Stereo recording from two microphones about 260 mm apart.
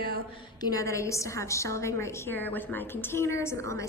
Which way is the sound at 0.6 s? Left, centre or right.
Centre.